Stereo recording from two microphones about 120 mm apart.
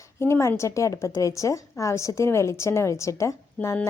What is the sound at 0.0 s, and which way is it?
A woman's voice, 25° left (ahead or behind).